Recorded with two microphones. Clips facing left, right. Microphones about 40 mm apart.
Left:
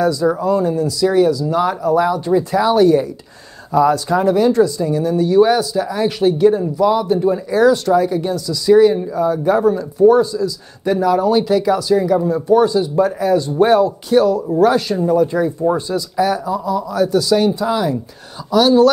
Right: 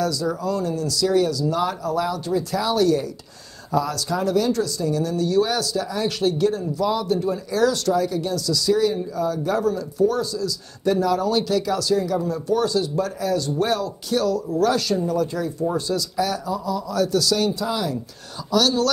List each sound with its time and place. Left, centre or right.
0.0 s speech: left